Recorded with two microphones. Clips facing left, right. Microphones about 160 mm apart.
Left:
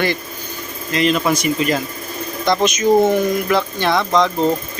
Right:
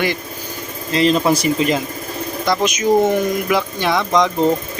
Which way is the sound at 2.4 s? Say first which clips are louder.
Left 2 dB; 10° right (ahead or behind).